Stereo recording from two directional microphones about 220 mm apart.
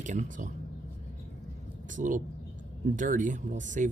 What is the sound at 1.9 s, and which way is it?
Speech, 35° right (ahead or behind).